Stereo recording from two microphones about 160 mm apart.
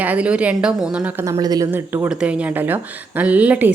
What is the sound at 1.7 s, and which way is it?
Speech, 10° right (ahead or behind).